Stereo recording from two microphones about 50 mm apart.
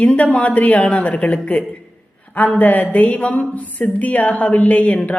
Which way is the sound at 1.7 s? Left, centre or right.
Left.